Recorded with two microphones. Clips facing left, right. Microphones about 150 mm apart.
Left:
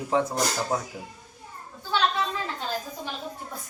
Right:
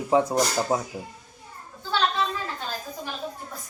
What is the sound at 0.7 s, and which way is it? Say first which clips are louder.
Speech: right 3 dB; 25° right (ahead or behind).